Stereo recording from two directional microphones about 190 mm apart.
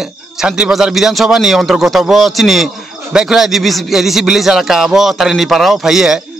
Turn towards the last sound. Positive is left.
turn(degrees=0)  # may be behind; listen again after turning